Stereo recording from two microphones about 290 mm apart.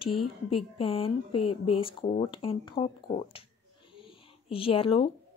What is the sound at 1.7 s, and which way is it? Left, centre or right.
Speech, centre.